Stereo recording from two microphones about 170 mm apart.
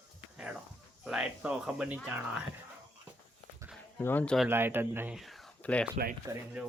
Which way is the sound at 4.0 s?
10° left (ahead or behind).